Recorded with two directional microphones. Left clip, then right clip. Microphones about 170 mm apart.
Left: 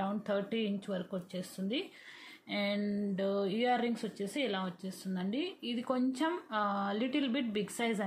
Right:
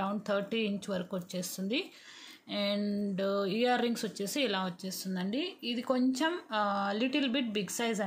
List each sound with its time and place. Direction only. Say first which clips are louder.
0.0 s speech: right 2 dB; 20° right (ahead or behind)
2.5 s speech: right 2 dB; 15° right (ahead or behind)